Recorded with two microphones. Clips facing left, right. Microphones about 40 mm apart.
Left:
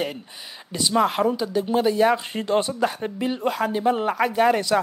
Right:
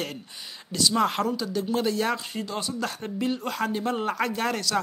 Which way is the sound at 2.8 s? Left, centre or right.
Centre.